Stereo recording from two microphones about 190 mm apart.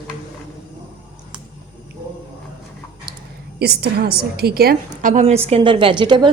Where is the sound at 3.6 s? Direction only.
55° right (ahead or behind); by 6.2 s 25° right (ahead or behind).